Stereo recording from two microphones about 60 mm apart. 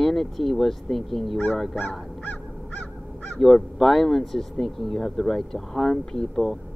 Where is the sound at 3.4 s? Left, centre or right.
Centre.